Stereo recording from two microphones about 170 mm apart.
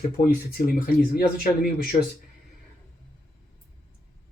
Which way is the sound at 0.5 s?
60° left (ahead or behind).